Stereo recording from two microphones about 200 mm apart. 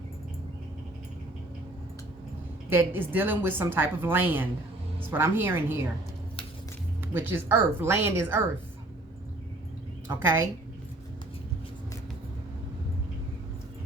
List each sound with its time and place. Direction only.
2.6 s a woman's voice: 10° right (ahead or behind)
7.0 s a woman's voice: 10° right (ahead or behind)
10.1 s a woman's voice: 10° right (ahead or behind)